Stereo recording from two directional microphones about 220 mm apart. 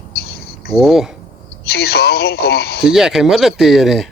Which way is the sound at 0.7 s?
Centre (ahead or behind).